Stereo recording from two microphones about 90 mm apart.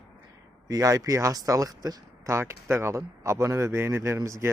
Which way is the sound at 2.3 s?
30° right (ahead or behind).